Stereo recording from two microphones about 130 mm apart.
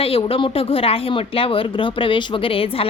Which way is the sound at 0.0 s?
45° left (ahead or behind).